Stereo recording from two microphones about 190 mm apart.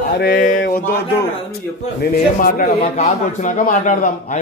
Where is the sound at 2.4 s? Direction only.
45° left (ahead or behind).